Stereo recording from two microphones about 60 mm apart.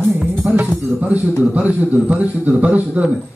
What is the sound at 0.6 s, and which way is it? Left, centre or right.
A man's voice, right.